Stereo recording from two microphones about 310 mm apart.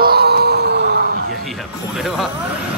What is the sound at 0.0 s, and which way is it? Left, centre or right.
Music, right.